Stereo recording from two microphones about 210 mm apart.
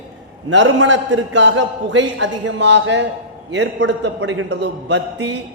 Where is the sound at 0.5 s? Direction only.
60° right (ahead or behind).